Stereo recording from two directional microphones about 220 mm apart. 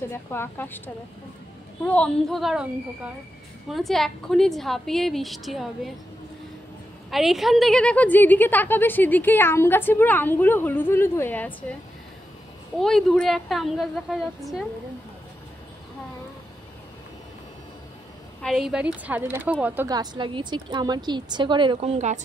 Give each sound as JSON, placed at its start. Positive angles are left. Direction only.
{"t": 0.1, "sound": "a woman's voice", "side_deg": 10}
{"t": 3.7, "sound": "a woman's voice", "side_deg": 0}
{"t": 7.1, "sound": "a woman's voice", "side_deg": 0}
{"t": 12.7, "sound": "a woman's voice", "side_deg": 0}
{"t": 18.4, "sound": "speech", "side_deg": 0}